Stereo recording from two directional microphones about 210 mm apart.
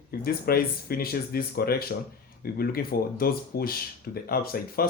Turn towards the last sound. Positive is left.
turn(degrees=45)  # may be behind; listen again after turning